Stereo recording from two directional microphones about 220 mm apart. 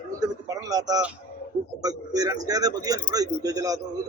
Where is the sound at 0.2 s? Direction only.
15° right (ahead or behind).